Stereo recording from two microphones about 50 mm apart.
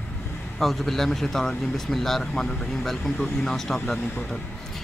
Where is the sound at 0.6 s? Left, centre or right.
Centre.